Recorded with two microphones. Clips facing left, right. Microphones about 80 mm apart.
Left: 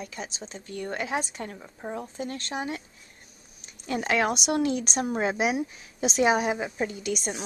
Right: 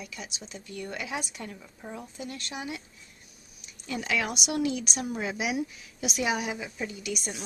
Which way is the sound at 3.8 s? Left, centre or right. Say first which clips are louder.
Left 5 dB; left.